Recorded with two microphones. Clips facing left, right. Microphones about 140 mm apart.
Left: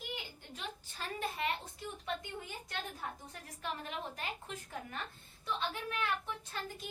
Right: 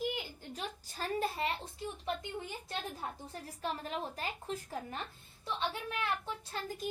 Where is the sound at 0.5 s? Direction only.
40° right (ahead or behind).